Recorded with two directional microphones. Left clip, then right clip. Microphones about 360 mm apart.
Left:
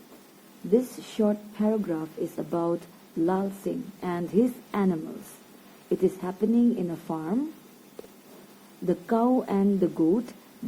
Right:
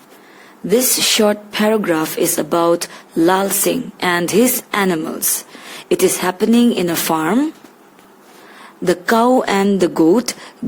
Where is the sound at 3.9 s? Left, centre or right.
Right.